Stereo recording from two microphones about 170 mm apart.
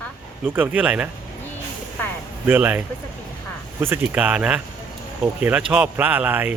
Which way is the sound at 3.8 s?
10° right (ahead or behind).